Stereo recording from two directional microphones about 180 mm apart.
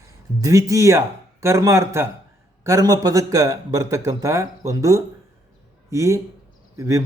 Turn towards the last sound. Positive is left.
turn(degrees=-15)  # may be behind; listen again after turning